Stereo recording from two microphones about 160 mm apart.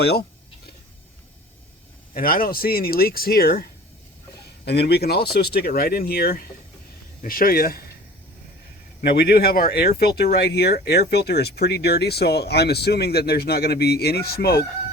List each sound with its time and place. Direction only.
0.0 s speech: 90° left
2.1 s speech: 65° left (ahead or behind)
4.6 s speech: 90° left; by 6.4 s 75° left (ahead or behind)
7.2 s speech: 65° left (ahead or behind)
9.0 s speech: 85° left